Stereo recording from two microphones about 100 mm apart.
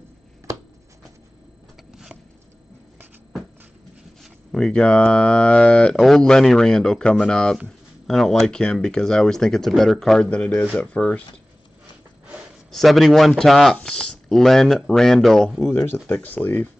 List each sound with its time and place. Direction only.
1.9 s a sound: 5° right (ahead or behind)
4.2 s speech: 5° left (ahead or behind)
12.7 s speech: centre (ahead or behind)
15.7 s speech: 20° left (ahead or behind)